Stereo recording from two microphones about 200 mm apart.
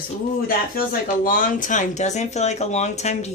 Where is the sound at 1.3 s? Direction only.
40° left (ahead or behind).